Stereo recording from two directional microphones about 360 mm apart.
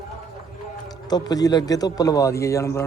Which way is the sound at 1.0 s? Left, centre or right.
Centre.